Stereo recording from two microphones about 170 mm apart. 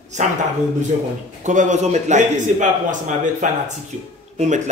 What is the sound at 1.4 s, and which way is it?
A man's voice, 45° right (ahead or behind).